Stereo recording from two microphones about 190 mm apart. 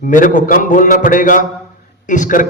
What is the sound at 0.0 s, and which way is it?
A man's voice, 45° left (ahead or behind).